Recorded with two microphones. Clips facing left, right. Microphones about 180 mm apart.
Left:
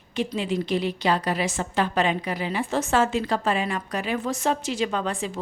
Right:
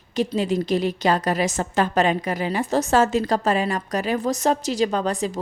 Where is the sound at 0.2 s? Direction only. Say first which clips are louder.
Right 4 dB; 40° right (ahead or behind).